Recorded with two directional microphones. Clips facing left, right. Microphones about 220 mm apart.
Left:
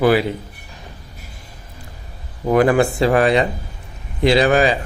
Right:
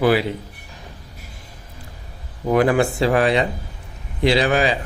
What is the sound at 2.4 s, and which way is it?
A man's voice, 50° left (ahead or behind).